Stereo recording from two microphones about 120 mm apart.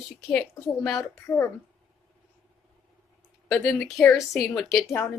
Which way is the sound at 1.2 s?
25° left (ahead or behind).